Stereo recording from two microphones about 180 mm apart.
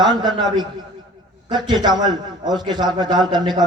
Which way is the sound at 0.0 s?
25° right (ahead or behind).